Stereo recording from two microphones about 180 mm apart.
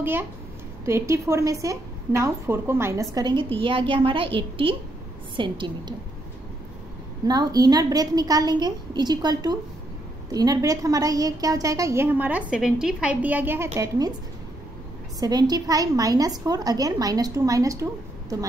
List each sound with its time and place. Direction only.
0.0 s a woman's voice: 10° right (ahead or behind)
7.2 s a woman's voice: 20° right (ahead or behind)
13.7 s a woman's voice: 20° right (ahead or behind)
15.1 s a woman's voice: 20° right (ahead or behind)